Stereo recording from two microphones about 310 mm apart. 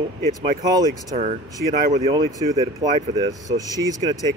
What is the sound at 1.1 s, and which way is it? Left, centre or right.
Speech, right.